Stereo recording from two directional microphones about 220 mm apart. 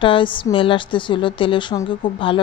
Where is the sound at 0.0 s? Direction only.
20° left (ahead or behind).